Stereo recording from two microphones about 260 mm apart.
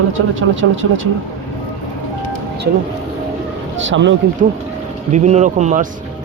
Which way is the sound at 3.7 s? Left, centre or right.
Right.